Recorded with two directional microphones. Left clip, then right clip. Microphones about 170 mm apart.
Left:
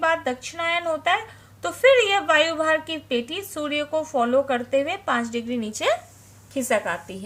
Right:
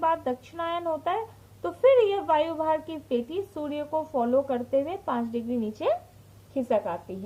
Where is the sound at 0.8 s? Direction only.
35° left (ahead or behind).